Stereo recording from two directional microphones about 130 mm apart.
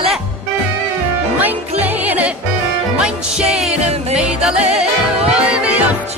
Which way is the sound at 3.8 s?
55° right (ahead or behind).